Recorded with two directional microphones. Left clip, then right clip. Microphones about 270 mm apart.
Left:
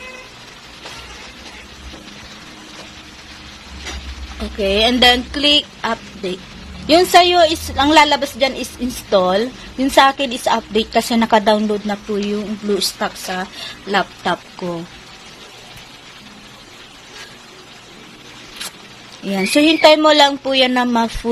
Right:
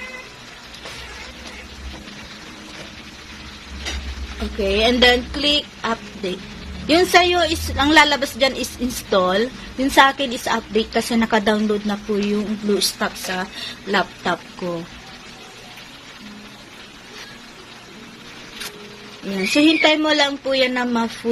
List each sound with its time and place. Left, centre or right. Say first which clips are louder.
4.6 s a woman's voice: left 2 dB; left
19.4 s a woman's voice: left 4 dB; left